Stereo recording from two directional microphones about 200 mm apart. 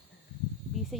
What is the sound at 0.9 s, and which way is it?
Speech, centre (ahead or behind).